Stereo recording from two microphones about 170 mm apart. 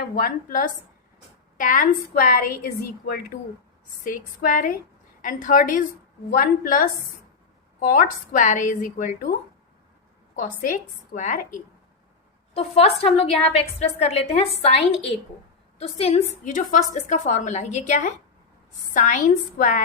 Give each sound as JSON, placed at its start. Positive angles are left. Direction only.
{"t": 0.2, "sound": "a woman's voice", "side_deg": 55}
{"t": 10.6, "sound": "a woman's voice", "side_deg": 50}
{"t": 12.5, "sound": "a woman's voice", "side_deg": 35}